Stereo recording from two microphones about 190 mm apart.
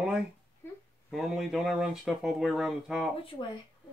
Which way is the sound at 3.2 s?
25° left (ahead or behind).